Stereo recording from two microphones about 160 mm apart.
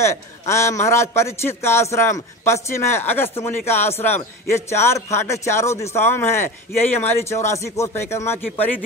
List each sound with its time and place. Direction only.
0.0 s a man's voice: 15° left (ahead or behind)